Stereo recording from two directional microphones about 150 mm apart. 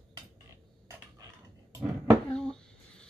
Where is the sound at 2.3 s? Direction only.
5° left (ahead or behind).